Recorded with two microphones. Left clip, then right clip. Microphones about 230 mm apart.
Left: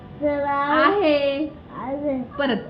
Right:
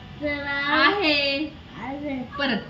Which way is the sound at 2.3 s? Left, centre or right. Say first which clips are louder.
Left 1 dB; right.